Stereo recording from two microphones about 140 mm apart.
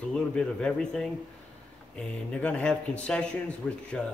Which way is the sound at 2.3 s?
10° left (ahead or behind).